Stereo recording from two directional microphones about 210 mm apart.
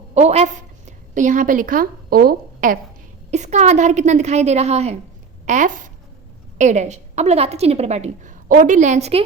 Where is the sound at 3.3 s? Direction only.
35° right (ahead or behind).